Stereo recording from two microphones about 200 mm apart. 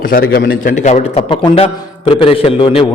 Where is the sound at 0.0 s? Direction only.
50° left (ahead or behind).